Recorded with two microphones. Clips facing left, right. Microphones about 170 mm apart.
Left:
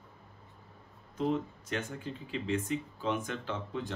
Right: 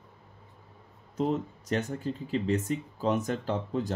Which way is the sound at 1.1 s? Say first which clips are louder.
Right 3 dB; 40° right (ahead or behind).